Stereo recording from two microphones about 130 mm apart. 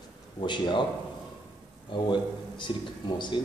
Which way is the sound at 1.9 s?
35° left (ahead or behind).